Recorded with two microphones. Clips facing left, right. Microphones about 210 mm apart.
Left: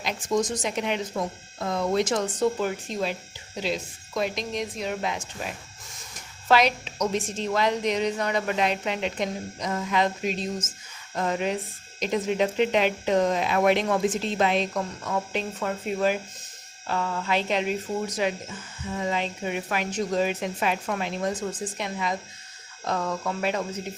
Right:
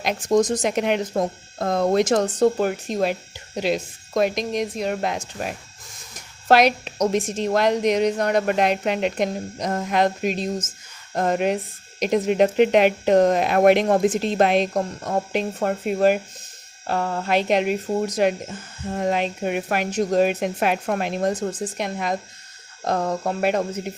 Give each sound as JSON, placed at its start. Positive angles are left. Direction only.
{"t": 0.0, "sound": "speech", "side_deg": -45}
{"t": 0.6, "sound": "speech", "side_deg": -55}
{"t": 7.4, "sound": "speech", "side_deg": -45}
{"t": 14.7, "sound": "speech", "side_deg": -40}
{"t": 16.8, "sound": "speech", "side_deg": -40}
{"t": 17.3, "sound": "speech", "side_deg": -55}
{"t": 17.9, "sound": "speech", "side_deg": -40}
{"t": 23.4, "sound": "speech", "side_deg": -55}